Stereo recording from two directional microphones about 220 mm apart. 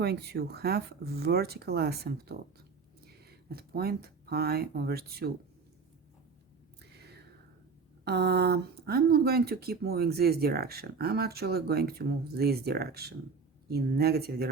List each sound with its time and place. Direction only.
0.0 s speech: 45° right (ahead or behind)
6.9 s a sound: 45° right (ahead or behind)
8.0 s speech: 50° right (ahead or behind)